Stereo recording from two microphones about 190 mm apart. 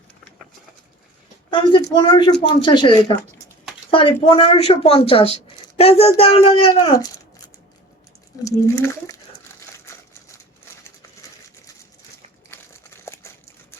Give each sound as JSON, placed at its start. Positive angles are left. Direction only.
{"t": 1.5, "sound": "speech", "side_deg": 25}
{"t": 8.4, "sound": "speech", "side_deg": 15}
{"t": 12.5, "sound": "crumpling", "side_deg": 15}